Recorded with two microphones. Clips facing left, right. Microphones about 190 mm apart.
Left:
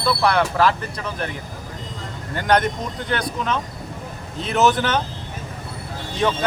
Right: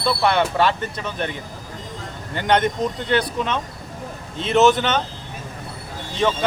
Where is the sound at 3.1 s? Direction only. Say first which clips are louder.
Right 1 dB; 30° right (ahead or behind).